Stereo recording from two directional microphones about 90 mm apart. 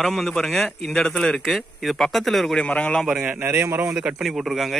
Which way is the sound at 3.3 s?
25° right (ahead or behind).